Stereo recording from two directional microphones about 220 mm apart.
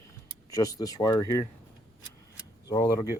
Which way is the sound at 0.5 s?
15° left (ahead or behind).